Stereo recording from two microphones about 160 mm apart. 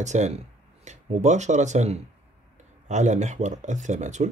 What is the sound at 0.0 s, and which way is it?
Speech, 45° right (ahead or behind).